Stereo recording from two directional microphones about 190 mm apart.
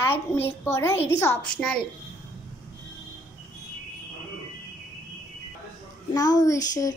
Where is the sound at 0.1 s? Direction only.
10° left (ahead or behind).